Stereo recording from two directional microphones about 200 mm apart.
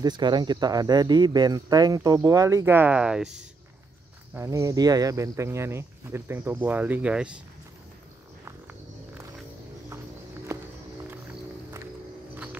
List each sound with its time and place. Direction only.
0.0 s speech: 20° right (ahead or behind); by 7.3 s 5° right (ahead or behind)